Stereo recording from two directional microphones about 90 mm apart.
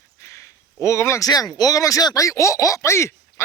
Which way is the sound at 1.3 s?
45° left (ahead or behind).